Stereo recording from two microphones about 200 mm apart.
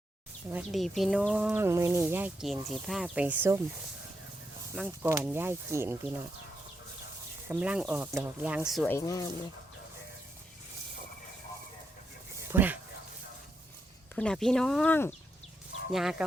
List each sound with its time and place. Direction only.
0.5 s speech: centre (ahead or behind)
4.7 s speech: 10° right (ahead or behind)
7.4 s speech: 5° right (ahead or behind)
8.9 s speech: 15° left (ahead or behind)
12.5 s speech: 10° right (ahead or behind)
14.2 s speech: 5° left (ahead or behind)
15.9 s speech: centre (ahead or behind)